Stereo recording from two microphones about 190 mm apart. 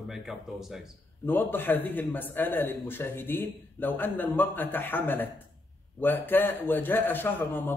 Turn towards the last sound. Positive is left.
turn(degrees=10)  # may be behind; listen again after turning